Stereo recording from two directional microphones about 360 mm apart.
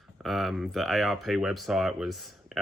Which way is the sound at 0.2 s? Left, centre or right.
Centre.